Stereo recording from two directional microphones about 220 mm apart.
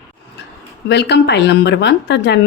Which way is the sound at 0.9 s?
50° left (ahead or behind).